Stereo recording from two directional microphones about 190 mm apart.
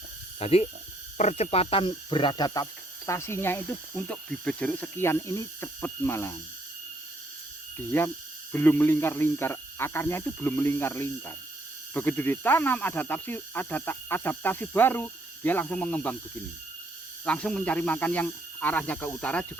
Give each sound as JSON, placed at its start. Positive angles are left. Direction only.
{"t": 0.3, "sound": "speech", "side_deg": 30}
{"t": 7.9, "sound": "speech", "side_deg": 10}
{"t": 17.2, "sound": "speech", "side_deg": 5}